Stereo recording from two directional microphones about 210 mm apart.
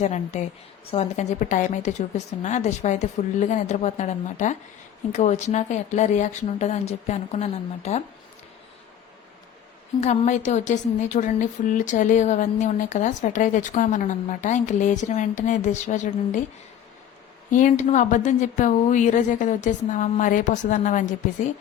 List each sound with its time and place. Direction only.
0.0 s a woman's voice: 35° left (ahead or behind)
10.0 s a woman's voice: 35° left (ahead or behind)
17.5 s a woman's voice: 35° left (ahead or behind)